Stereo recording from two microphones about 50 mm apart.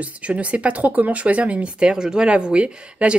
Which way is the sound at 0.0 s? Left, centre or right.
Right.